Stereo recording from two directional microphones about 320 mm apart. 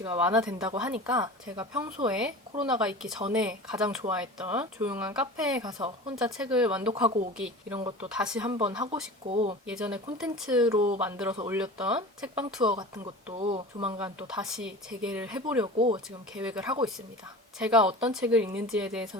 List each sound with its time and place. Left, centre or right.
0.0 s speech: centre
9.2 s speech: centre
9.6 s speech: centre
10.8 s speech: right
11.0 s speech: centre
12.7 s speech: centre
14.0 s speech: centre
15.6 s speech: centre
16.3 s speech: centre